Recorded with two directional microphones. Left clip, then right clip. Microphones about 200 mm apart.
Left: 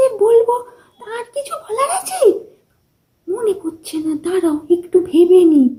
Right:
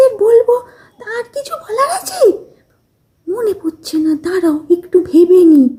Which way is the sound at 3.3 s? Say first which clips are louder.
Right 2 dB; 45° right (ahead or behind).